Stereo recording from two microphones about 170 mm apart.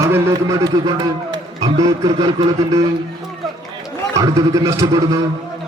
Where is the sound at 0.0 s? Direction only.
15° right (ahead or behind).